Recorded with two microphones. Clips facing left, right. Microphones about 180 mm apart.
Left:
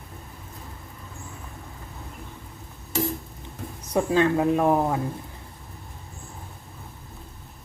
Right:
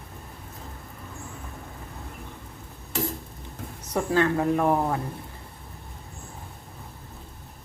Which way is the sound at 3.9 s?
20° left (ahead or behind).